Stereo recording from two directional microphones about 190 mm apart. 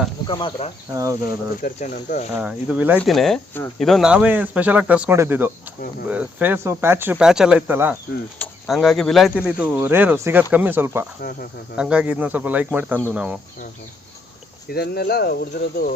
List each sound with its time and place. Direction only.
0.3 s speech: 25° left (ahead or behind)
1.6 s speech: 40° left (ahead or behind)
2.4 s speech: 5° right (ahead or behind)
3.2 s speech: 5° left (ahead or behind)
11.2 s speech: 50° left (ahead or behind)
11.8 s speech: 5° right (ahead or behind)
14.7 s speech: 55° left (ahead or behind)